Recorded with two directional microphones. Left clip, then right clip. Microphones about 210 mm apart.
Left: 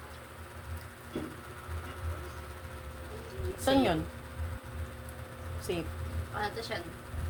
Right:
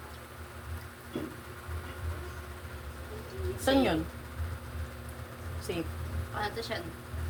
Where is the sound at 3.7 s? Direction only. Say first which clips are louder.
Right 1 dB; 35° left (ahead or behind).